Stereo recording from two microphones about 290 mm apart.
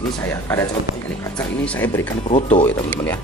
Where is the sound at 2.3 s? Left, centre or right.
Left.